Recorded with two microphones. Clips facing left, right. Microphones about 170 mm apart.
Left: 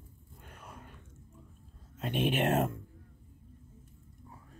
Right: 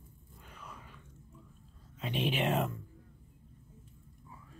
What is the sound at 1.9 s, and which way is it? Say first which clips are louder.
Speech: left 3 dB; 50° left (ahead or behind).